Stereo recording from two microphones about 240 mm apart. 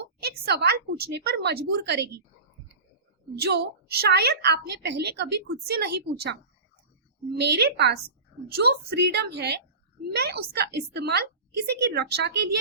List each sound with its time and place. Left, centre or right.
0.2 s a woman's voice: right
3.3 s a woman's voice: right
7.3 s a woman's voice: right